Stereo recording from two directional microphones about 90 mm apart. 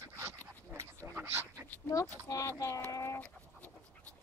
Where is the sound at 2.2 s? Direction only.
35° left (ahead or behind).